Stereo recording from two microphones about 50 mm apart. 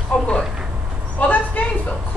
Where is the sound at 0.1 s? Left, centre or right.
Left.